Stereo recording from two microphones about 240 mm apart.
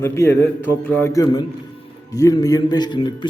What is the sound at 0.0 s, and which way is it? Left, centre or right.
A man's voice, centre.